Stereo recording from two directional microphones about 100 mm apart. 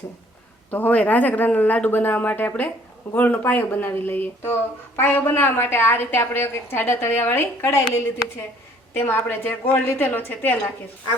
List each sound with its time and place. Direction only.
0.7 s a woman's voice: 15° left (ahead or behind)
9.0 s a woman's voice: 20° left (ahead or behind)